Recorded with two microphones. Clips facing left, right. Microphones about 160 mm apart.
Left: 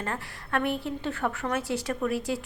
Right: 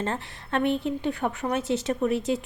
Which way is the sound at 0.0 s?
25° right (ahead or behind).